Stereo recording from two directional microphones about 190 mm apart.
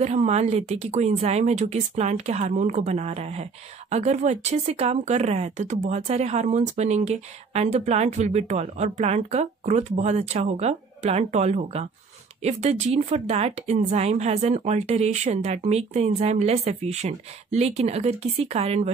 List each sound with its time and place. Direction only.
0.0 s speech: 35° right (ahead or behind)